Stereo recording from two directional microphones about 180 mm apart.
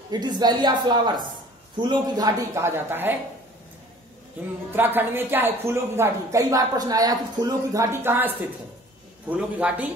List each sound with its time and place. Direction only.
0.1 s a woman's voice: 25° right (ahead or behind)
4.7 s a woman's voice: 10° right (ahead or behind)
9.3 s a woman's voice: 5° right (ahead or behind)